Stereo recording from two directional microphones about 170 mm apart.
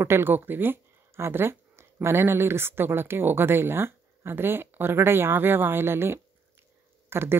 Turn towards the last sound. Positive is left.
turn(degrees=-15)  # may be behind; listen again after turning